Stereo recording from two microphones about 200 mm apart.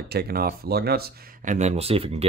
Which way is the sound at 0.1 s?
50° right (ahead or behind).